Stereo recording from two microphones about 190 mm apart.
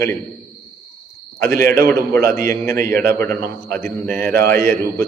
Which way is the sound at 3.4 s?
15° left (ahead or behind).